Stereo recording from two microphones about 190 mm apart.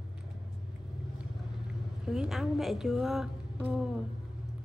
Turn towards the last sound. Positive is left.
turn(degrees=-5)  # may be behind; listen again after turning